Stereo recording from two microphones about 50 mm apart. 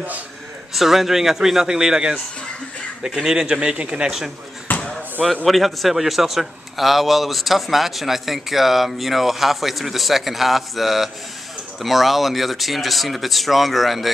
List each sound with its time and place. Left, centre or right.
0.7 s speech: centre
3.2 s speech: centre
4.7 s basketball bounce: left
5.2 s a man's voice: centre